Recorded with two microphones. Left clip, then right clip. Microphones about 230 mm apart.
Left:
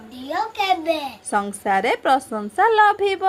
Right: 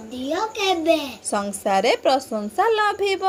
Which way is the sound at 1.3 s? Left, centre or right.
Left.